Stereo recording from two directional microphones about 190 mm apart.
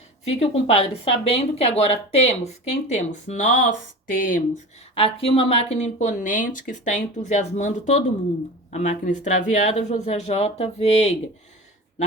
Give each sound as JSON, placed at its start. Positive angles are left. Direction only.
{"t": 0.3, "sound": "speech", "side_deg": 35}
{"t": 4.9, "sound": "speech", "side_deg": 30}